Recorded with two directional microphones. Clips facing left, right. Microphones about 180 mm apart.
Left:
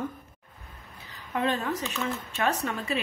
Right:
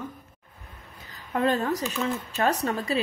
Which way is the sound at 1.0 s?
45° right (ahead or behind).